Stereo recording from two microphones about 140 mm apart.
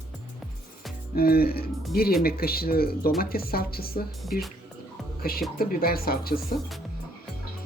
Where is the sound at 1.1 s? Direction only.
90° left.